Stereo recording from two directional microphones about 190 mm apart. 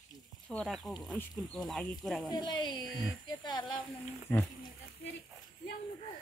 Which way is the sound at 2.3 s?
25° left (ahead or behind).